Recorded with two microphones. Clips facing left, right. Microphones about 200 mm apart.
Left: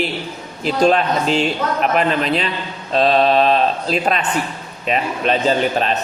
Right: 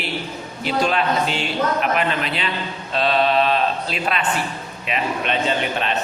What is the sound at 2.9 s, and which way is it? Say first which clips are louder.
Mantra: left 4 dB; 35° left (ahead or behind).